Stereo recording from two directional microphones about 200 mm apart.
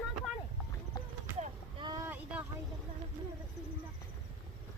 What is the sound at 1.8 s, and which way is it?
Boat, 20° right (ahead or behind).